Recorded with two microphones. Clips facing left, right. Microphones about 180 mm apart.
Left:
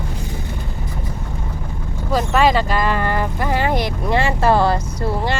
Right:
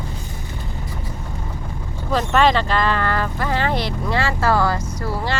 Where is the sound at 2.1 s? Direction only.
10° left (ahead or behind); by 5.3 s 25° left (ahead or behind).